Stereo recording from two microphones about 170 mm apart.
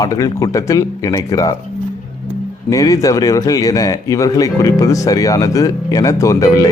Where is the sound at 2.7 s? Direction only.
20° left (ahead or behind).